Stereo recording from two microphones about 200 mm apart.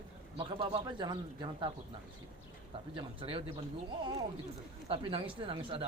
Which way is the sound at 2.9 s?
25° right (ahead or behind).